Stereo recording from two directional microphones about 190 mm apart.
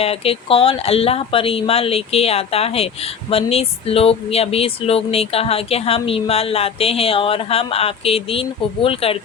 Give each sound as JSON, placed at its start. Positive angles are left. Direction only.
{"t": 0.0, "sound": "speech", "side_deg": 30}